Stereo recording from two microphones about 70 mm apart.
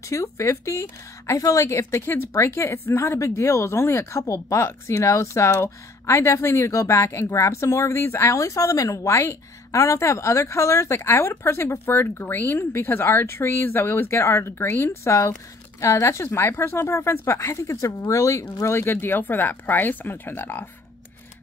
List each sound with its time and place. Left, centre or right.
0.1 s speech: left
18.6 s speech: left